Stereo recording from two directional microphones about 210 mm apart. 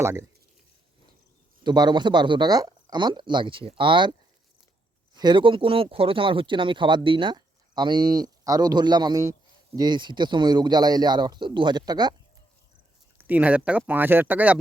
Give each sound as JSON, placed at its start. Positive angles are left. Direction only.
{"t": 0.0, "sound": "speech", "side_deg": -15}
{"t": 1.6, "sound": "speech", "side_deg": -20}
{"t": 5.1, "sound": "speech", "side_deg": -20}
{"t": 13.1, "sound": "speech", "side_deg": -10}